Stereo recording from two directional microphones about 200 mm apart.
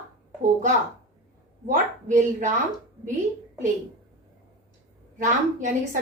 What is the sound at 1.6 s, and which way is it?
Speech, 40° right (ahead or behind).